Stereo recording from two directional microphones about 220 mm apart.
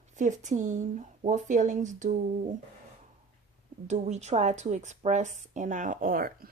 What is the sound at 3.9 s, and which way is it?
Speech, 30° right (ahead or behind).